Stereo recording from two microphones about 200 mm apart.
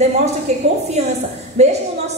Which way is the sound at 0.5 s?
35° right (ahead or behind).